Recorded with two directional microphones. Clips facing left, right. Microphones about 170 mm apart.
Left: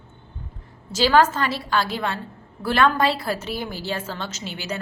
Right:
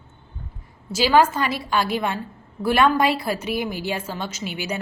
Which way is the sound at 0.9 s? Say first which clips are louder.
Even; 10° right (ahead or behind).